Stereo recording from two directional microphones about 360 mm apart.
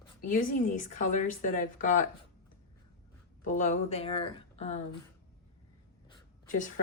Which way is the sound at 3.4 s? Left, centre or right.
Left.